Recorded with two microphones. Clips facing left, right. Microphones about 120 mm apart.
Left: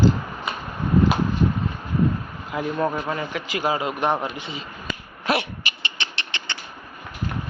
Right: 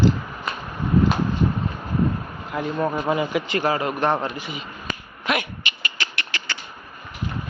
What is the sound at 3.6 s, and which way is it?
Speech, 15° left (ahead or behind).